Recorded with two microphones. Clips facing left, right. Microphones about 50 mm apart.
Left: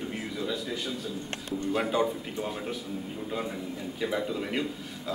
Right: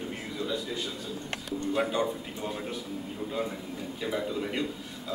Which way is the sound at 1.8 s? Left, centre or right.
Centre.